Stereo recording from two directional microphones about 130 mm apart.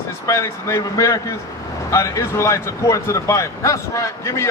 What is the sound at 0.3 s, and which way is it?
A man's voice, 20° left (ahead or behind).